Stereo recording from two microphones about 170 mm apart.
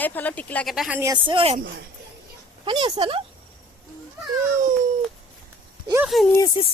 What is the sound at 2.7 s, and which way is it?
Speech, 25° right (ahead or behind).